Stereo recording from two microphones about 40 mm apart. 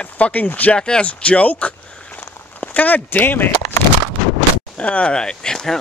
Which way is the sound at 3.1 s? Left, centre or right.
Left.